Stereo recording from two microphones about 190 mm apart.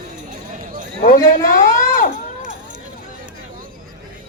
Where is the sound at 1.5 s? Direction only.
45° left (ahead or behind).